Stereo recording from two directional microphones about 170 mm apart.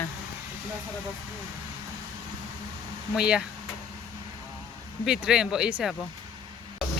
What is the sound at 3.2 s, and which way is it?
Speech, 5° right (ahead or behind).